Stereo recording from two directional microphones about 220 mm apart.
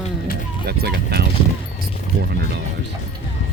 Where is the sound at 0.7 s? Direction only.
45° right (ahead or behind).